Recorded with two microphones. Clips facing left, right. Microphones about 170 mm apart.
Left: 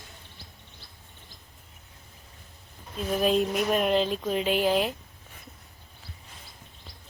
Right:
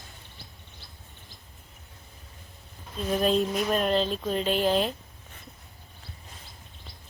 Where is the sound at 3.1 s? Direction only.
5° left (ahead or behind).